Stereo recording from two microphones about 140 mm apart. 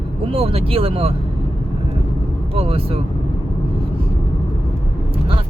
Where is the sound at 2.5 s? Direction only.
45° right (ahead or behind).